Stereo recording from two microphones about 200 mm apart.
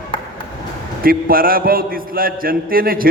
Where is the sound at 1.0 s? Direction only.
45° right (ahead or behind).